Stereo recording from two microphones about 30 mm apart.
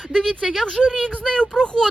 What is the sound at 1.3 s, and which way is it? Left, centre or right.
Speech, left.